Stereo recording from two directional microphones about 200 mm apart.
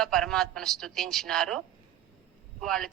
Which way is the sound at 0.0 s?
5° left (ahead or behind).